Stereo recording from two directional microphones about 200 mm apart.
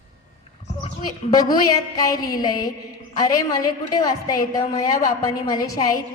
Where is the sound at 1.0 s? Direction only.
20° left (ahead or behind).